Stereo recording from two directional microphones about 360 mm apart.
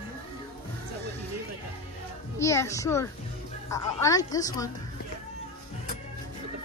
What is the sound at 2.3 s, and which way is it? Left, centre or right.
A woman's voice, centre.